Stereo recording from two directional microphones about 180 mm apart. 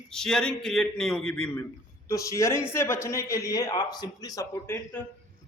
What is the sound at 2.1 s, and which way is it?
A man's voice, 15° left (ahead or behind).